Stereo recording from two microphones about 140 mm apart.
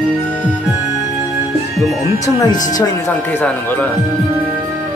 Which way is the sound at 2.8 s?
15° left (ahead or behind).